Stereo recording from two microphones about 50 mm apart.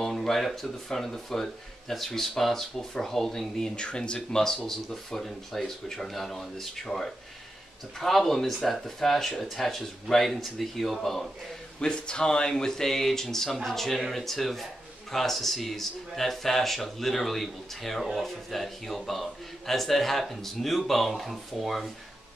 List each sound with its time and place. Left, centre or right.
0.0 s a sound: centre
0.5 s speech: centre
3.7 s speech: centre
4.5 s speech: centre
11.8 s speech: centre